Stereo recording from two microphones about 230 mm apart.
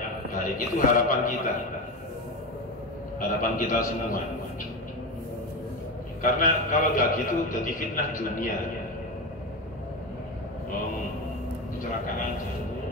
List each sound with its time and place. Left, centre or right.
0.3 s a man's voice: left
3.2 s a man's voice: left
6.2 s a man's voice: left